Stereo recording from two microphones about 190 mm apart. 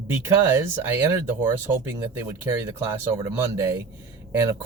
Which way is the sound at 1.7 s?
10° right (ahead or behind).